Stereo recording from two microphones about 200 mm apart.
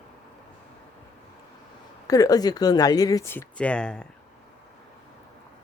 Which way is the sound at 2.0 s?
15° left (ahead or behind).